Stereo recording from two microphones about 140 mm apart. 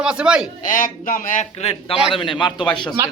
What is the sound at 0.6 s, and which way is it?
Speech, 75° left (ahead or behind).